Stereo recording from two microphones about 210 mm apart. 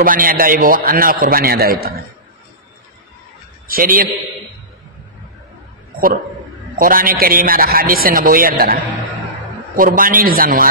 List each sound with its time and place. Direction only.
0.0 s a man's voice: 40° right (ahead or behind)
3.6 s a man's voice: 45° right (ahead or behind)
6.8 s a man's voice: 45° right (ahead or behind)
9.8 s a man's voice: 40° right (ahead or behind)